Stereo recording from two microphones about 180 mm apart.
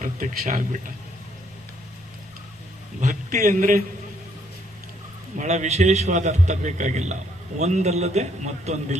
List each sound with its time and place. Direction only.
0.0 s a man's voice: 45° right (ahead or behind)
3.0 s a man's voice: 45° right (ahead or behind)
5.4 s a man's voice: 40° right (ahead or behind)